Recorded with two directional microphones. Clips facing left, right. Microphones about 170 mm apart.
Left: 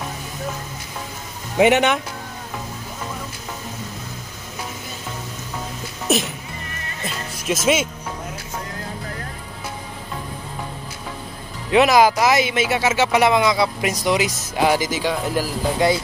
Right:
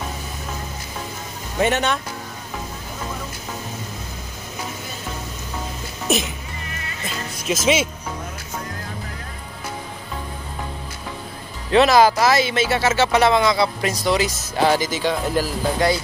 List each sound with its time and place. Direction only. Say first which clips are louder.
1.6 s speech: left 5 dB; 15° left (ahead or behind)
6.0 s speech: left 1 dB; centre (ahead or behind)
7.1 s music: even; centre (ahead or behind)
11.7 s speech: even; 15° left (ahead or behind)